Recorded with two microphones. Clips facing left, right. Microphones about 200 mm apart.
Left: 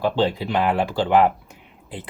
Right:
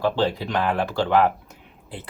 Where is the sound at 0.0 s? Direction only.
15° left (ahead or behind).